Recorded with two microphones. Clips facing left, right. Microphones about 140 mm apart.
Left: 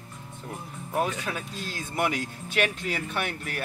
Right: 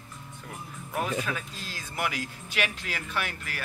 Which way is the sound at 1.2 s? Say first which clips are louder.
Left 2 dB; 25° left (ahead or behind).